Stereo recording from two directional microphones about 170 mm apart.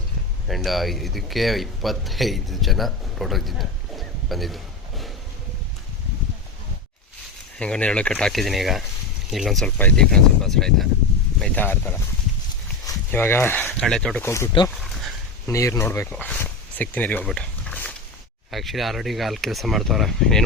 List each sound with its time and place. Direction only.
0.4 s speech: centre (ahead or behind)
7.6 s speech: 5° left (ahead or behind)
13.1 s speech: 10° left (ahead or behind)
14.2 s speech: 15° left (ahead or behind)
16.1 s a sound: 10° left (ahead or behind)
18.5 s speech: centre (ahead or behind)